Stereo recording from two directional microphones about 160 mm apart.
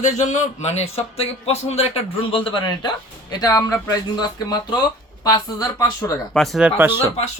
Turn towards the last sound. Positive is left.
turn(degrees=-15)  # may be behind; listen again after turning